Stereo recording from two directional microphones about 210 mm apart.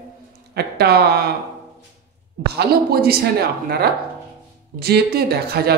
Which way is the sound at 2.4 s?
50° right (ahead or behind).